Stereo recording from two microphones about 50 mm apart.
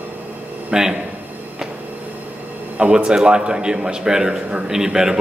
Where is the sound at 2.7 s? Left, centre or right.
Centre.